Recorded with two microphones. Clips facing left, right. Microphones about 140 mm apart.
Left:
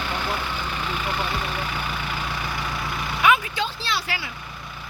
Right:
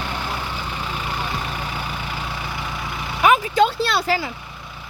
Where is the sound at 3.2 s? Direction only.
40° right (ahead or behind).